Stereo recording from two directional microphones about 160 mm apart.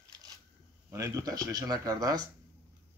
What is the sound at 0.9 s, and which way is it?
Speech, 20° right (ahead or behind).